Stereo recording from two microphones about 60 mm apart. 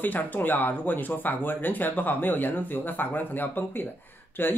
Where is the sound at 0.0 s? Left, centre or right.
Left.